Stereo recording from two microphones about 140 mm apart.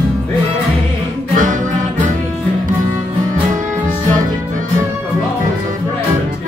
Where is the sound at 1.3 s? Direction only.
65° right (ahead or behind).